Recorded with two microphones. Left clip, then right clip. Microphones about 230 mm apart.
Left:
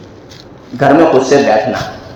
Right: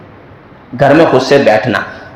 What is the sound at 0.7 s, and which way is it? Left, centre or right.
A man's voice, right.